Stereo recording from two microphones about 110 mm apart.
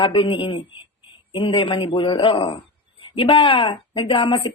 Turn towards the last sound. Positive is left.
turn(degrees=55)  # may be behind; listen again after turning